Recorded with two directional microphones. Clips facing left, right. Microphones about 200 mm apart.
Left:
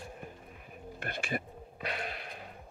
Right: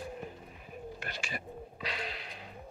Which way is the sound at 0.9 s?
55° left (ahead or behind).